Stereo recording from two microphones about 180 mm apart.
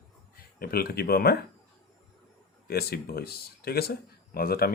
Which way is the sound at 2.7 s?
60° left (ahead or behind).